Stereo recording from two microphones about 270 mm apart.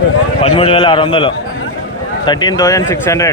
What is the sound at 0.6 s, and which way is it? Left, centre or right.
A man's voice, left.